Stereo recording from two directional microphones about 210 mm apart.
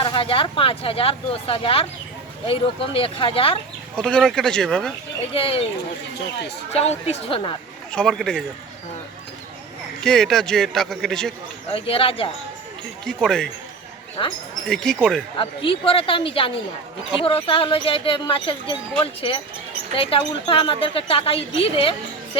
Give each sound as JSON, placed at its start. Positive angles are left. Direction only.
{"t": 0.0, "sound": "a woman's voice", "side_deg": 25}
{"t": 3.9, "sound": "speech", "side_deg": 5}
{"t": 5.3, "sound": "a woman's voice", "side_deg": 25}
{"t": 6.7, "sound": "a woman's voice", "side_deg": 30}
{"t": 7.9, "sound": "speech", "side_deg": 0}
{"t": 10.0, "sound": "speech", "side_deg": 0}
{"t": 11.7, "sound": "a woman's voice", "side_deg": 25}
{"t": 13.1, "sound": "speech", "side_deg": 0}
{"t": 14.2, "sound": "a woman's voice", "side_deg": 25}
{"t": 15.4, "sound": "a woman's voice", "side_deg": 25}
{"t": 19.9, "sound": "a woman's voice", "side_deg": 25}